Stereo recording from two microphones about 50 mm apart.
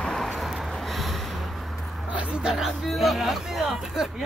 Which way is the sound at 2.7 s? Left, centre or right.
Centre.